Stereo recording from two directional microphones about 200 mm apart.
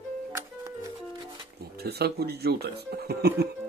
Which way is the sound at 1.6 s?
50° right (ahead or behind).